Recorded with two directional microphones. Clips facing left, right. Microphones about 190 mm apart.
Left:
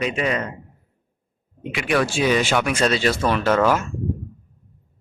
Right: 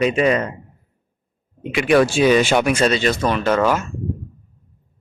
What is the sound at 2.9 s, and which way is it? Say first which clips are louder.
Speech: right 1 dB; 5° left (ahead or behind).